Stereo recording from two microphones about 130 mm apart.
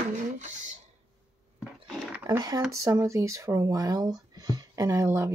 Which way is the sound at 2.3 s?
30° right (ahead or behind).